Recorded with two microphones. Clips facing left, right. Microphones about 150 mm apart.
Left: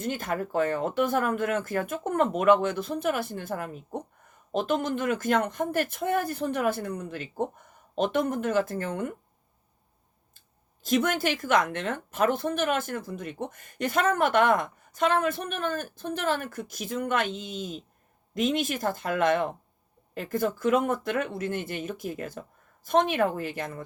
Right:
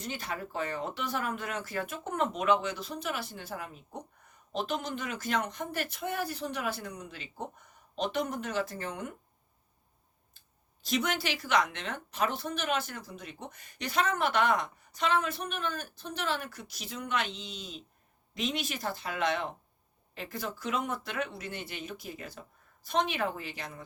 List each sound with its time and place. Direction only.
0.0 s speech: 50° left (ahead or behind)
10.8 s speech: 50° left (ahead or behind)